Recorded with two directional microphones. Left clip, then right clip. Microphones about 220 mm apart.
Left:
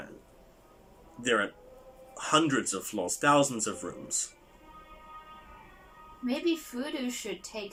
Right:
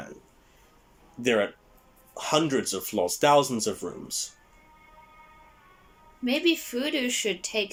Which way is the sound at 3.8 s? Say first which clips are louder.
Right 4 dB; 15° right (ahead or behind).